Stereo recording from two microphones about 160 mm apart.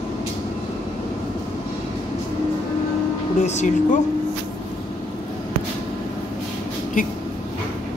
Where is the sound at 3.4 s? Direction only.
45° left (ahead or behind).